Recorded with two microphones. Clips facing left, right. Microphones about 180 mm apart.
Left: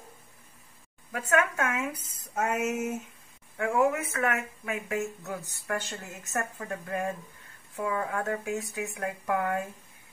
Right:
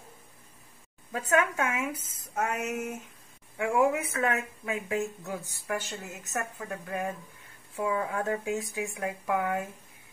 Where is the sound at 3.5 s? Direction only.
15° right (ahead or behind).